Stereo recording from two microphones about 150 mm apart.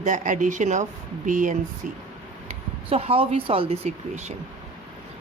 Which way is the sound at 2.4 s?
40° right (ahead or behind).